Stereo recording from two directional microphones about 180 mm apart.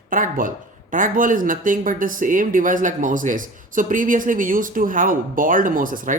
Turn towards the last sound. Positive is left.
turn(degrees=-50)  # may be behind; listen again after turning